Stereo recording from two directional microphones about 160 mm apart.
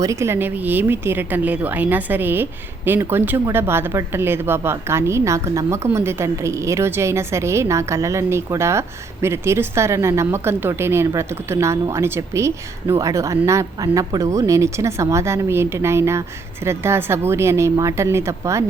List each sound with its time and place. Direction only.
0.0 s speech: 20° right (ahead or behind)